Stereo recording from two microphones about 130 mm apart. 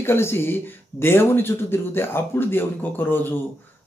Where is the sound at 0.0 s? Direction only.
20° left (ahead or behind).